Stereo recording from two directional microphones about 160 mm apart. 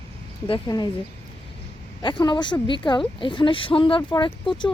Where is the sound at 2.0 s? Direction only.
30° left (ahead or behind).